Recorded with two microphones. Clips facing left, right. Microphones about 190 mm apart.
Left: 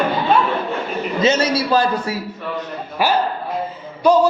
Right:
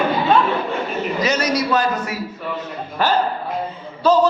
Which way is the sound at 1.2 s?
25° left (ahead or behind).